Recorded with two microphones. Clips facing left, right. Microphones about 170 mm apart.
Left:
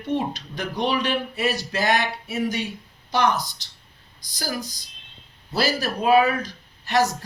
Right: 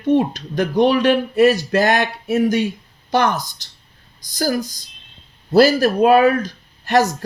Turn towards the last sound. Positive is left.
turn(degrees=-45)  # may be behind; listen again after turning